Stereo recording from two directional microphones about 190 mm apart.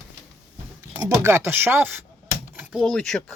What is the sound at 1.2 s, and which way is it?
Speech, 15° right (ahead or behind).